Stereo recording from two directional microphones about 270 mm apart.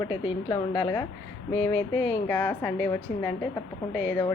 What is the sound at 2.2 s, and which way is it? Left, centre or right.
A woman's voice, centre.